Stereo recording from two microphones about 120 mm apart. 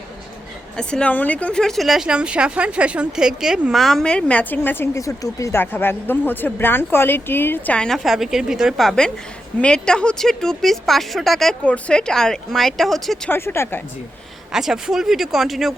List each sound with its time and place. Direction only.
0.8 s speech: 5° left (ahead or behind)
13.3 s speech: 20° left (ahead or behind)
14.5 s speech: 5° right (ahead or behind)